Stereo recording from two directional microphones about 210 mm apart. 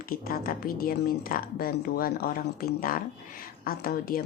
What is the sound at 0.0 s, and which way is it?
A woman's voice, 45° left (ahead or behind).